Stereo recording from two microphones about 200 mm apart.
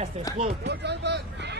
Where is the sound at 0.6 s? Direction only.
55° right (ahead or behind).